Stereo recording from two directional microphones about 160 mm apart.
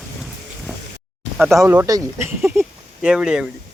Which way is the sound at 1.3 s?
Centre (ahead or behind).